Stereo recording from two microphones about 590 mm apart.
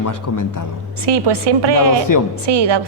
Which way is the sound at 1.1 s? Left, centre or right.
Right.